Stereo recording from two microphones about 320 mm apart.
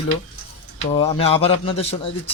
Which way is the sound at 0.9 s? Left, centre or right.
Centre.